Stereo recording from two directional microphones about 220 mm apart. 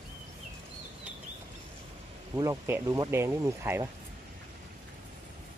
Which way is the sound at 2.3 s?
15° right (ahead or behind).